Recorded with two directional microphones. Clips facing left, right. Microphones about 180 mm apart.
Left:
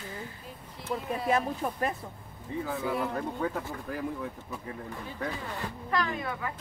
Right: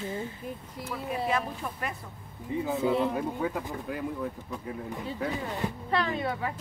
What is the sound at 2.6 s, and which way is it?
Speech, 25° right (ahead or behind).